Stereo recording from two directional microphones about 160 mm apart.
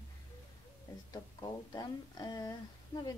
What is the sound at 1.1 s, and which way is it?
A woman's voice, 25° left (ahead or behind).